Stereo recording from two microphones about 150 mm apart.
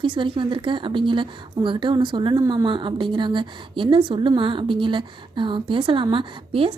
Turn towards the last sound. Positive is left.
turn(degrees=-35)  # may be behind; listen again after turning